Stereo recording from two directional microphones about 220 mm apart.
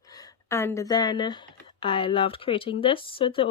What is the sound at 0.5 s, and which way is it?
Speech, 10° left (ahead or behind).